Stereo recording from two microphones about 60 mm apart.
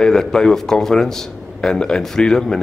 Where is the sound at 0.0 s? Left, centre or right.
Centre.